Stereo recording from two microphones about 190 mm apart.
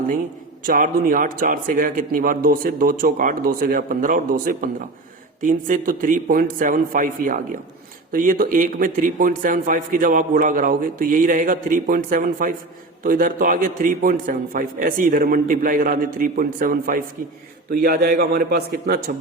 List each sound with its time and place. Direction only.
0.6 s a man's voice: 45° right (ahead or behind)
17.7 s a man's voice: 55° right (ahead or behind)